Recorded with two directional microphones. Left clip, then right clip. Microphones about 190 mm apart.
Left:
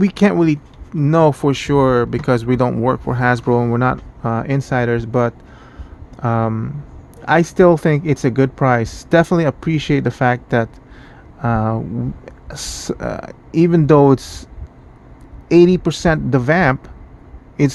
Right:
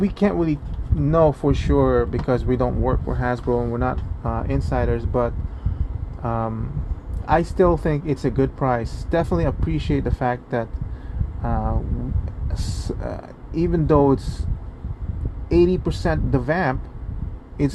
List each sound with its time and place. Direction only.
0.0 s speech: 55° left (ahead or behind)
15.4 s speech: 60° left (ahead or behind)